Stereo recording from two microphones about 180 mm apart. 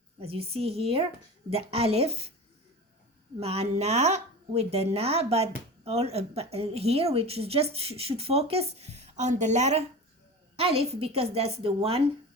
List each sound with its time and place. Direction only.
0.2 s a woman's voice: 35° right (ahead or behind)
3.4 s a woman's voice: 35° right (ahead or behind)